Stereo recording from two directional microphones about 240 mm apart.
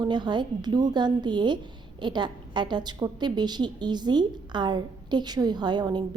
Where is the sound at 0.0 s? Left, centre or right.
Centre.